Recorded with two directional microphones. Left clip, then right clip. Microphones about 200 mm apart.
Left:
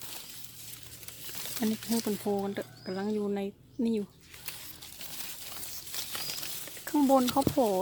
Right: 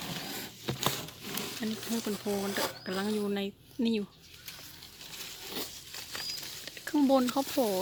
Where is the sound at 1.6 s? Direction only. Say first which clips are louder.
Left 8 dB; 15° left (ahead or behind).